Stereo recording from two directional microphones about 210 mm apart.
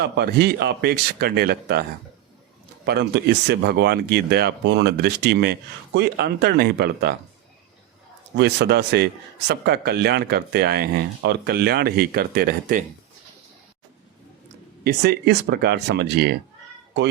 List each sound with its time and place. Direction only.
0.0 s speech: 50° right (ahead or behind)
2.8 s speech: 55° right (ahead or behind)
8.4 s speech: 55° right (ahead or behind)
14.8 s speech: 50° right (ahead or behind)